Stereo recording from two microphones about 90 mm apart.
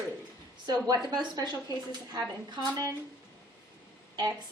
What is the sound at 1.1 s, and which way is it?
A woman's voice, 50° right (ahead or behind).